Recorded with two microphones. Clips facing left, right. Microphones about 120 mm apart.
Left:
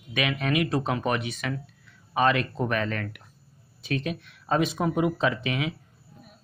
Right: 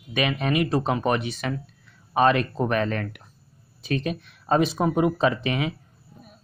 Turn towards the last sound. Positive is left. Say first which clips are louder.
# right 3 dB
turn(degrees=-40)  # may be behind; listen again after turning